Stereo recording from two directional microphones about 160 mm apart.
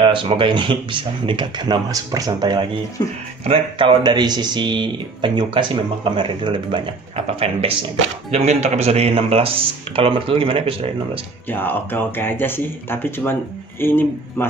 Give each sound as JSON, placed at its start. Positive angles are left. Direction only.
{"t": 0.0, "sound": "speech", "side_deg": -30}
{"t": 11.4, "sound": "speech", "side_deg": 10}